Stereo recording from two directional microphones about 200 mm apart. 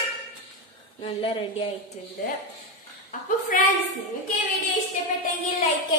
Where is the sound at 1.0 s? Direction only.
30° left (ahead or behind).